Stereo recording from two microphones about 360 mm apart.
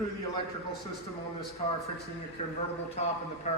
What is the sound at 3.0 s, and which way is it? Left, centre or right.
Speech, centre.